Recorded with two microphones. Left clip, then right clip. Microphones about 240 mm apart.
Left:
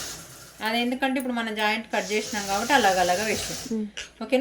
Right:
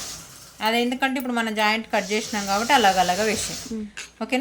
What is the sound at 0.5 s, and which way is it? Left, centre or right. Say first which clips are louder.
Speech: right 4 dB; right.